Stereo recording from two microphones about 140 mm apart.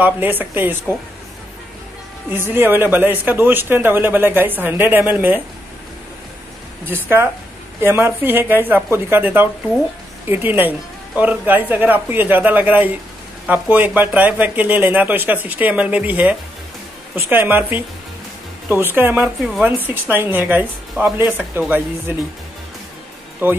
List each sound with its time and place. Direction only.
0.0 s speech: 15° right (ahead or behind)
2.3 s speech: 15° right (ahead or behind)
6.9 s speech: 15° right (ahead or behind)
19.4 s speech: centre (ahead or behind)
19.8 s speech: 15° right (ahead or behind)
23.4 s speech: 15° right (ahead or behind)